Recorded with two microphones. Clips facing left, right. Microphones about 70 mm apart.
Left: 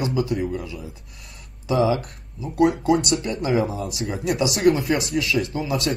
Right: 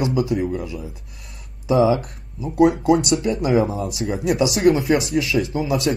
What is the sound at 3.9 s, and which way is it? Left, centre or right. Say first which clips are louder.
Speech: right 3 dB; centre.